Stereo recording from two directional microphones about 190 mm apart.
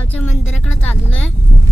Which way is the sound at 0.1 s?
10° left (ahead or behind).